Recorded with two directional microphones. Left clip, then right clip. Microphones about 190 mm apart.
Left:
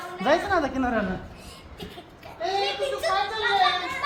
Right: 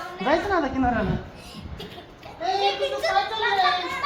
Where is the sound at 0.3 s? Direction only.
60° left (ahead or behind).